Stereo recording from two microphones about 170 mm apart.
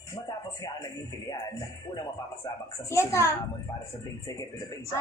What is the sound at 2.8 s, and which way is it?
Music, 15° left (ahead or behind).